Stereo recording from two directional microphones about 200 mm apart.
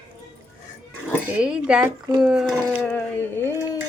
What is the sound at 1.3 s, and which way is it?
Speech, 5° right (ahead or behind).